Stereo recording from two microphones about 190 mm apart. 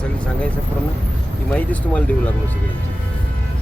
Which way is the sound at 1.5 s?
10° left (ahead or behind).